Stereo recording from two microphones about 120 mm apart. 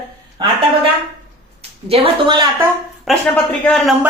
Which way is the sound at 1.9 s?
40° right (ahead or behind).